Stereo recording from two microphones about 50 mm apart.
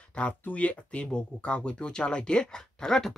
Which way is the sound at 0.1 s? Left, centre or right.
Left.